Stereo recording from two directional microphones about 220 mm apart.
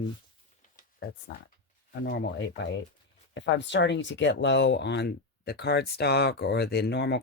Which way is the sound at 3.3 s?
55° left (ahead or behind).